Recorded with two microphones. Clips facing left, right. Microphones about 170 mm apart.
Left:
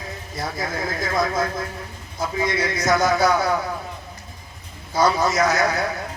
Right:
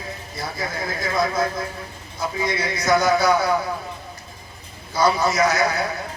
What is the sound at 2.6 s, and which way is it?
Speech, 45° left (ahead or behind).